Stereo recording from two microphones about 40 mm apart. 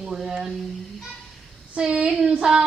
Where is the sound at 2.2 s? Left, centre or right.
Centre.